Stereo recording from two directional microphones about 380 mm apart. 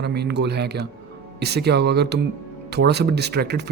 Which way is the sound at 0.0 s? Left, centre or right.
Right.